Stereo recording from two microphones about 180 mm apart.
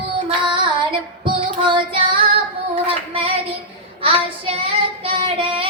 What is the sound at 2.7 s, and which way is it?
Female singing, 30° right (ahead or behind).